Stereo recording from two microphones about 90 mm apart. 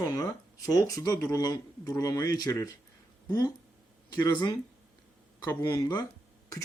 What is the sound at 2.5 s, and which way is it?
Speech, 30° left (ahead or behind).